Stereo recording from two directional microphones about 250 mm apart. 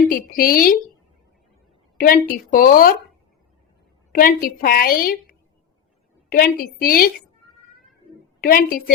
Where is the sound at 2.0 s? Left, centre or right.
Left.